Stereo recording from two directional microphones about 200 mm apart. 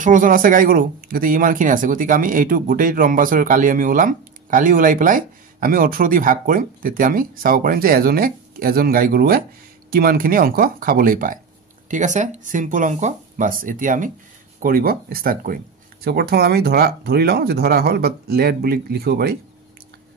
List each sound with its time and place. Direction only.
0.0 s speech: 40° right (ahead or behind)